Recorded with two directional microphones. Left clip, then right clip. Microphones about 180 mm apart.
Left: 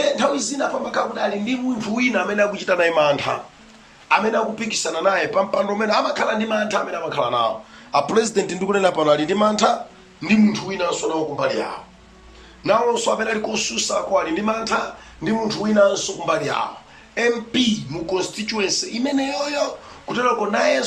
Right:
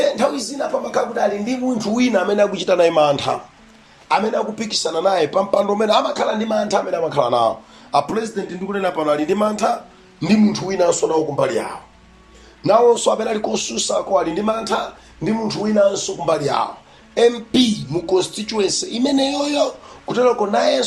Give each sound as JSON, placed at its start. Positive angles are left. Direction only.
{"t": 0.0, "sound": "a sound", "side_deg": -25}
{"t": 0.9, "sound": "a man's voice", "side_deg": -30}
{"t": 8.0, "sound": "a man's voice", "side_deg": -5}
{"t": 8.4, "sound": "a man's voice", "side_deg": 5}
{"t": 10.2, "sound": "a man's voice", "side_deg": -25}
{"t": 12.6, "sound": "a man's voice", "side_deg": -25}